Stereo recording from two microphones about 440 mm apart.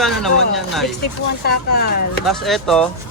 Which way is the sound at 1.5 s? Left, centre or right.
Left.